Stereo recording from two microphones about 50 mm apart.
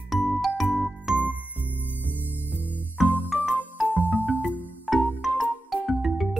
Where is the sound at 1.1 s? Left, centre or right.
Centre.